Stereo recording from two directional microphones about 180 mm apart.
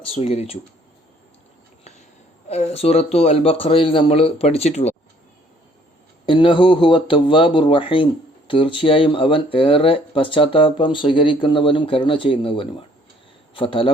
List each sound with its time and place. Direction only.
0.1 s a man's voice: 35° left (ahead or behind)
2.5 s a man's voice: 35° left (ahead or behind)
6.2 s speech: 30° left (ahead or behind)